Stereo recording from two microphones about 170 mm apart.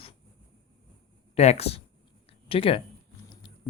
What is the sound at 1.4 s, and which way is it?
Speech, 40° left (ahead or behind).